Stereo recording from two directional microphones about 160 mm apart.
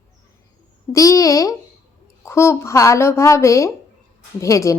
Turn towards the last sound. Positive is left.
turn(degrees=20)  # may be behind; listen again after turning